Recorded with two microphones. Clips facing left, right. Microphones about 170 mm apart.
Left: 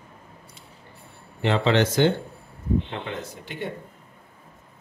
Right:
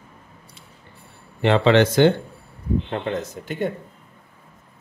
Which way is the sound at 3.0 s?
45° right (ahead or behind).